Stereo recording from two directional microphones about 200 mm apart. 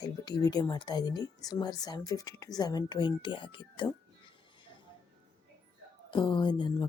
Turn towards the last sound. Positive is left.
turn(degrees=20)  # may be behind; listen again after turning